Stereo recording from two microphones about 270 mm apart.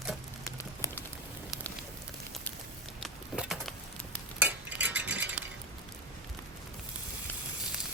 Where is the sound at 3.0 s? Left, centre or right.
Centre.